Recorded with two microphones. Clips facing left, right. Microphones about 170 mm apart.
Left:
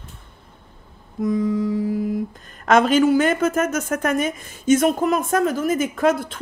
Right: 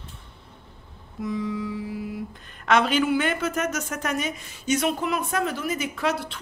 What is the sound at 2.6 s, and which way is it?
Speech, 45° left (ahead or behind).